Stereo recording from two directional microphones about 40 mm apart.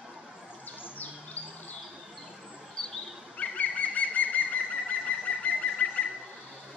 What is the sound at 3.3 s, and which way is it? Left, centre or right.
Bird, left.